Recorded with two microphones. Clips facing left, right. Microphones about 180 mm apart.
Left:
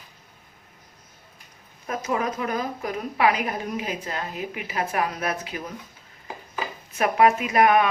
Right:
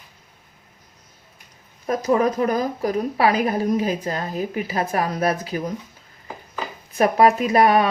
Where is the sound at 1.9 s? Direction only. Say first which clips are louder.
Right 7 dB; 35° right (ahead or behind).